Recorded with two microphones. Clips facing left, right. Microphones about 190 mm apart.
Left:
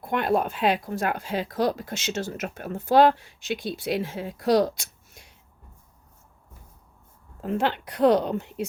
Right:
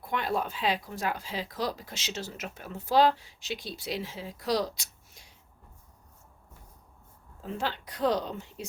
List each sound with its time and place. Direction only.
0.0 s speech: 55° left (ahead or behind)
7.4 s speech: 60° left (ahead or behind)